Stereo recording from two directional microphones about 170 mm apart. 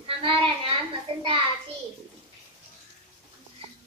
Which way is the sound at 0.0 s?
30° right (ahead or behind).